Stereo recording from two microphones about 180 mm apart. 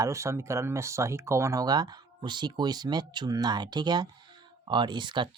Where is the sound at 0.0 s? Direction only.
15° right (ahead or behind).